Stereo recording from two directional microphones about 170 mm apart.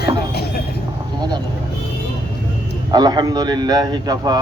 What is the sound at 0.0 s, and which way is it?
Vehicle, 70° left (ahead or behind).